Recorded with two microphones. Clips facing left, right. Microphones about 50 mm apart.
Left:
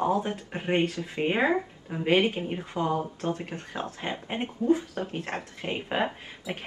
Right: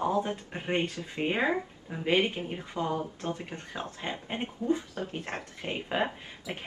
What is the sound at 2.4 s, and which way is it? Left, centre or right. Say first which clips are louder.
Speech: left 4 dB; centre.